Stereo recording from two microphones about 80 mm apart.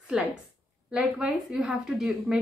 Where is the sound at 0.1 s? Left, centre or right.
Centre.